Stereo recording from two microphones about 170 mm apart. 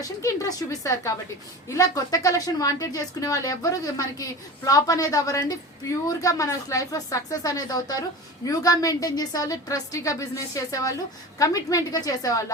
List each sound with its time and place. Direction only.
0.0 s speech: 20° left (ahead or behind)